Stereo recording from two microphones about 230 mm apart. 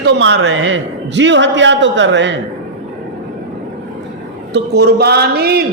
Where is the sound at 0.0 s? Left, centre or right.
Right.